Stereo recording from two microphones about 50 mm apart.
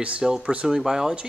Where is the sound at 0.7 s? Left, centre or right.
Centre.